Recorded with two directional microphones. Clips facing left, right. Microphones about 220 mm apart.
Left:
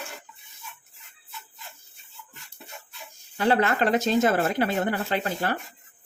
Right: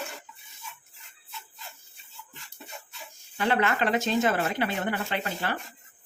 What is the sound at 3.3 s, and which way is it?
Speech, 35° left (ahead or behind).